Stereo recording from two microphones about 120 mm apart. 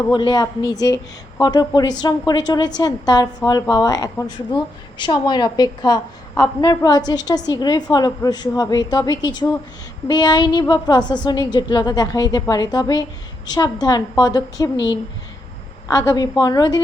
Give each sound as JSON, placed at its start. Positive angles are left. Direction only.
{"t": 0.1, "sound": "a woman's voice", "side_deg": 35}
{"t": 15.9, "sound": "a woman's voice", "side_deg": 25}